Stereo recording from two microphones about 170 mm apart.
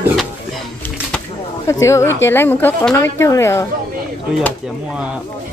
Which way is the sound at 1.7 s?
15° left (ahead or behind).